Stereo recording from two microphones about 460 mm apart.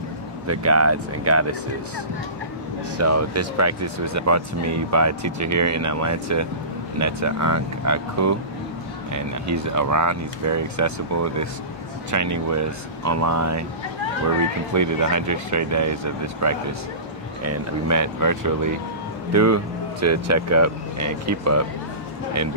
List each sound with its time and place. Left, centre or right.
0.5 s speech: right
3.0 s speech: right